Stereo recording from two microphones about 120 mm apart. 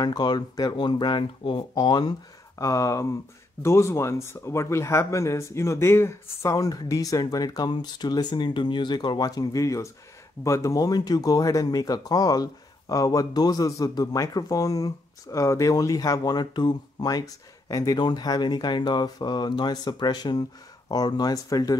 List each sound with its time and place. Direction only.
0.0 s speech: 35° left (ahead or behind)
2.6 s speech: 25° left (ahead or behind)